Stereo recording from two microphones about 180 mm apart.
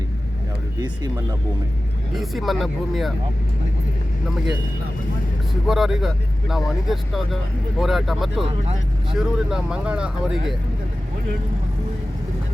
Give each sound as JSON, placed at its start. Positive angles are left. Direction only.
{"t": 0.8, "sound": "speech", "side_deg": -20}
{"t": 2.1, "sound": "speech", "side_deg": 0}
{"t": 5.6, "sound": "speech", "side_deg": 0}